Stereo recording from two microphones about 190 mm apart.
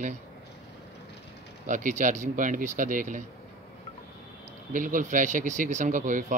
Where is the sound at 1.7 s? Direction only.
40° right (ahead or behind).